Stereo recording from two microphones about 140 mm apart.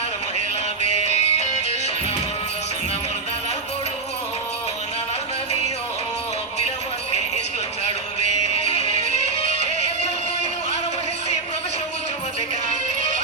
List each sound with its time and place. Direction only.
0.8 s music: 50° left (ahead or behind)
8.4 s music: 45° left (ahead or behind)